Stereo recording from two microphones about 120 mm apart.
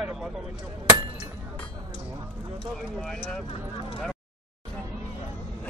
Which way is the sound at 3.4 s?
50° left (ahead or behind).